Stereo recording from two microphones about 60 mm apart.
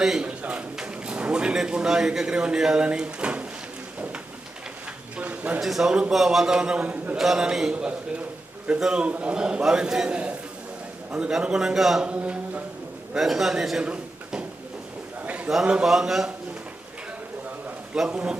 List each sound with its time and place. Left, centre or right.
0.0 s speech: centre
5.1 s a sound: right
5.5 s a man's voice: centre; by 7.2 s right
7.2 s a man's voice: centre
12.0 s speech: right
13.1 s a man's voice: centre
13.8 s a sound: centre
15.6 s a man's voice: centre
15.9 s a man's voice: centre
18.1 s speech: centre